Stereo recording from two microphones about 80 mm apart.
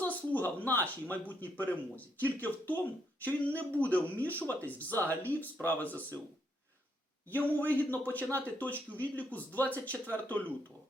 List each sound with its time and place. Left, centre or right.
0.0 s speech: centre
7.7 s speech: left